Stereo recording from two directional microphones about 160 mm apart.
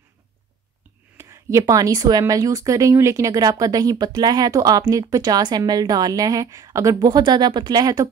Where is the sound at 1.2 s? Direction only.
20° right (ahead or behind).